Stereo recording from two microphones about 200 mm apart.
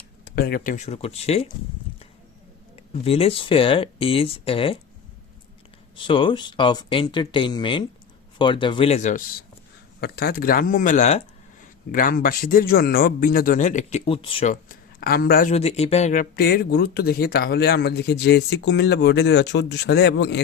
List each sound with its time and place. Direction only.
0.3 s speech: 50° left (ahead or behind); by 1.5 s 30° left (ahead or behind)
2.7 s speech: 30° left (ahead or behind)
6.0 s speech: 25° left (ahead or behind)
10.0 s a man's voice: 50° left (ahead or behind); by 14.5 s 25° left (ahead or behind)
14.5 s speech: 45° left (ahead or behind)
15.5 s speech: 30° left (ahead or behind)
16.3 s speech: 50° left (ahead or behind)